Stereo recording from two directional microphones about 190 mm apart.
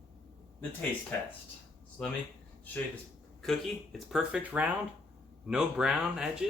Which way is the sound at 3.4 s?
Centre (ahead or behind).